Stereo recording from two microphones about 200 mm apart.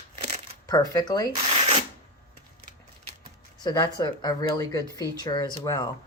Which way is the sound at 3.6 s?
20° left (ahead or behind).